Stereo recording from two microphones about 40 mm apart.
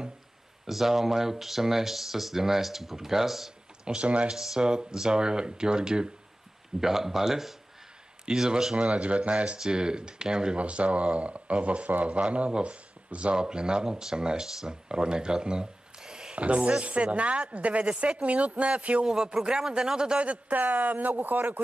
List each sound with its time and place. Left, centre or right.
0.7 s speech: centre
3.8 s speech: right
4.3 s speech: centre
6.8 s speech: centre
8.7 s speech: right
9.6 s speech: right
10.6 s speech: right
13.4 s speech: right
16.3 s speech: right
19.0 s speech: centre
20.2 s speech: right
20.5 s speech: right